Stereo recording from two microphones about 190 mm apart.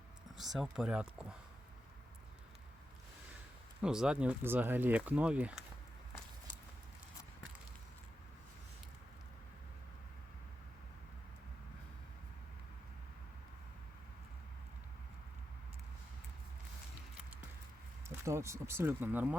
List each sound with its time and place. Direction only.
0.3 s speech: centre (ahead or behind)
3.8 s speech: 5° right (ahead or behind)
18.3 s speech: 15° right (ahead or behind)